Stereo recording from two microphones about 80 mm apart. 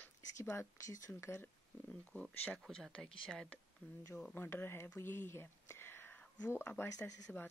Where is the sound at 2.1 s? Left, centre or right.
Centre.